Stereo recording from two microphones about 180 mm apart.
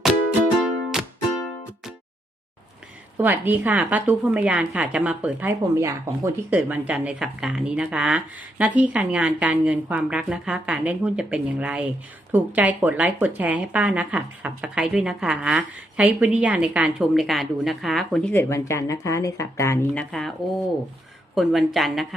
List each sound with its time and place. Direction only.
0.6 s music: centre (ahead or behind)
3.2 s a woman's voice: 10° right (ahead or behind)
21.3 s speech: centre (ahead or behind)